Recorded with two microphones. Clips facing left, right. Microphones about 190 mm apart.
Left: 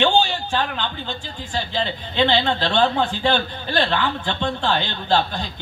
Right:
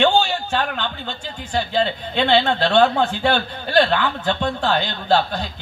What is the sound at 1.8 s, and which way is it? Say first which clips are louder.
Speech: even; 50° right (ahead or behind).